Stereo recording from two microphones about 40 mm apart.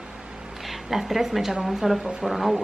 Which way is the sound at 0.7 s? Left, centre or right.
Centre.